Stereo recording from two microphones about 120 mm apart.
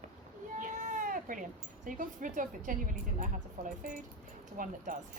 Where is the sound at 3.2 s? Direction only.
90° right.